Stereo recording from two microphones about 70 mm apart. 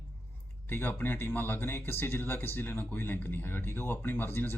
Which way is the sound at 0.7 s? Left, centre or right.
Left.